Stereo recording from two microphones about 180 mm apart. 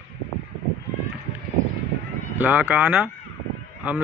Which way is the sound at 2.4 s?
10° right (ahead or behind).